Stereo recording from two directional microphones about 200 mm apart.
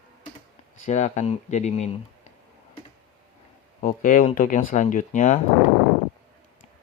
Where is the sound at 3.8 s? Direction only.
45° left (ahead or behind).